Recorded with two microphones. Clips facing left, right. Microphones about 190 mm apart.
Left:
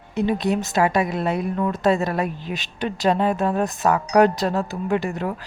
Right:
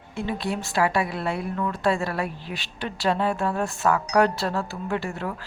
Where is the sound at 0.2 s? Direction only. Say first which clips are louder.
Left 7 dB; 20° left (ahead or behind).